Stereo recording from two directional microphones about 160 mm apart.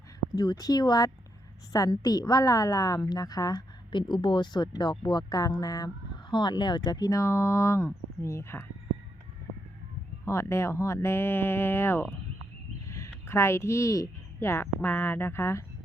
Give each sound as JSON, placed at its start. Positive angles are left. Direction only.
{"t": 0.3, "sound": "a woman's voice", "side_deg": 25}
{"t": 10.2, "sound": "speech", "side_deg": 15}